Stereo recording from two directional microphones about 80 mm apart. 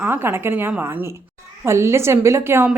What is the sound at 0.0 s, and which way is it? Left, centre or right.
Speech, right.